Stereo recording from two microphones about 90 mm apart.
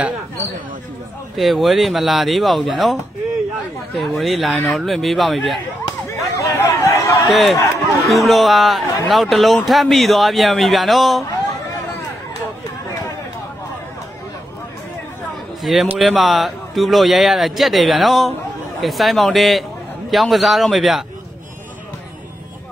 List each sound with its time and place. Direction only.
1.3 s speech: centre (ahead or behind)
6.3 s a sound: 35° left (ahead or behind)
7.2 s speech: centre (ahead or behind)
15.6 s speech: centre (ahead or behind)